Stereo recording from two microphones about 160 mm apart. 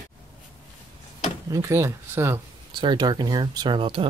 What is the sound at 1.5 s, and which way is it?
Speech, 20° right (ahead or behind).